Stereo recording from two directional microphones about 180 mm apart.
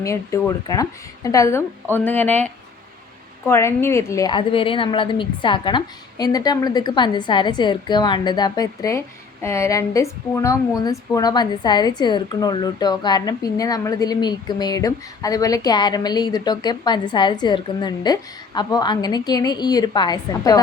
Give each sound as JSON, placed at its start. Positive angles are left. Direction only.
{"t": 0.0, "sound": "a woman's voice", "side_deg": 15}